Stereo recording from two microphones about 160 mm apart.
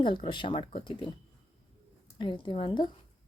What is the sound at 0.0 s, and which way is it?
Speech, 30° left (ahead or behind).